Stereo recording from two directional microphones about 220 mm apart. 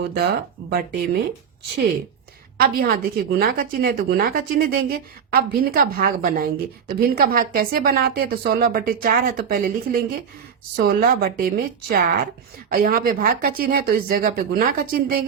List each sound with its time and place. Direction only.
0.7 s a woman's voice: 40° right (ahead or behind)
2.6 s a woman's voice: 40° right (ahead or behind)